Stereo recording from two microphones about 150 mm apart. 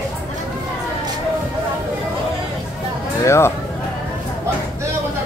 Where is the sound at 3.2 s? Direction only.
20° left (ahead or behind).